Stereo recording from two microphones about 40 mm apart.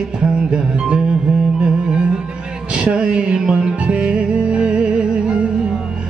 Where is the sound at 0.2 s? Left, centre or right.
Right.